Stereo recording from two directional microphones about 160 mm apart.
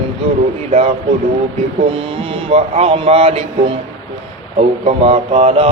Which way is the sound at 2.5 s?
40° right (ahead or behind).